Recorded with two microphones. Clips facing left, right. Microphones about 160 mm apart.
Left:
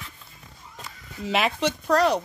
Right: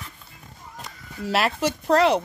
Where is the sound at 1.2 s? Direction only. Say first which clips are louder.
Right 1 dB; 5° right (ahead or behind).